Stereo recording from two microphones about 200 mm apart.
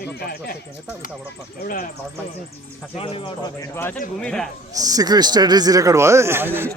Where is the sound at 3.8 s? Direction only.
10° left (ahead or behind).